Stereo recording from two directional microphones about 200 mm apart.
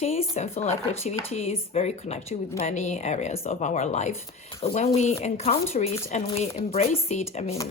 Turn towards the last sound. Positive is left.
turn(degrees=35)  # may be behind; listen again after turning